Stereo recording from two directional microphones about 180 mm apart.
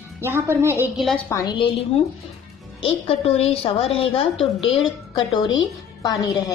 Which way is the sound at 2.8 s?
35° left (ahead or behind).